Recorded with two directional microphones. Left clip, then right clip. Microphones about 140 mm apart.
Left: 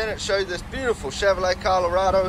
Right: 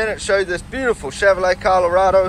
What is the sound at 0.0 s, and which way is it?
Speech, centre (ahead or behind).